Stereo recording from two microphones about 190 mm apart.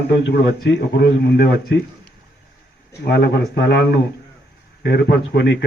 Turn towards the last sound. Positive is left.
turn(degrees=60)  # may be behind; listen again after turning